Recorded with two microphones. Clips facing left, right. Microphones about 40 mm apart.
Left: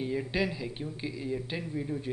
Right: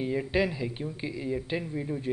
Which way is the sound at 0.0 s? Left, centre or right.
Centre.